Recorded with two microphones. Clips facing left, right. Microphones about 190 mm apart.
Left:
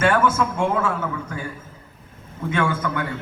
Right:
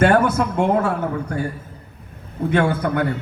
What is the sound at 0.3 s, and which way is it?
Speech, 65° right (ahead or behind).